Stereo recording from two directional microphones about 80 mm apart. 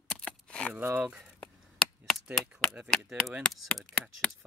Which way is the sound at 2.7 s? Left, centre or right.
Centre.